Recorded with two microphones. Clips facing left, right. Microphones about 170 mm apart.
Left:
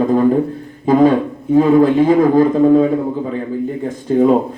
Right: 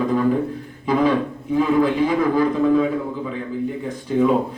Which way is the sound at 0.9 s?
50° left (ahead or behind).